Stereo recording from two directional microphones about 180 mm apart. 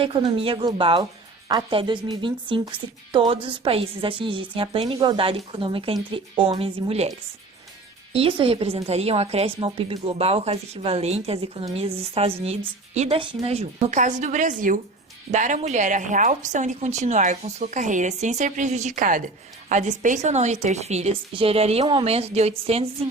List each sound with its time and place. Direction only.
0.0 s a woman's voice: 30° right (ahead or behind)
8.1 s a woman's voice: 30° right (ahead or behind)